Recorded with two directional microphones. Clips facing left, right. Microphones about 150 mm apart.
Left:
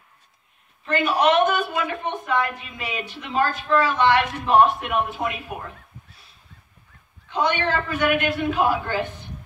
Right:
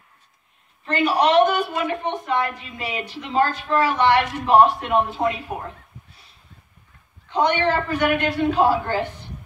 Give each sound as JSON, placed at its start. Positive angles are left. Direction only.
{"t": 0.8, "sound": "a woman's voice", "side_deg": -25}
{"t": 7.2, "sound": "a woman's voice", "side_deg": -20}